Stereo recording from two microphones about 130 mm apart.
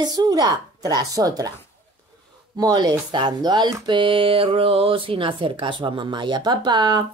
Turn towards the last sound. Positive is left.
turn(degrees=-35)  # may be behind; listen again after turning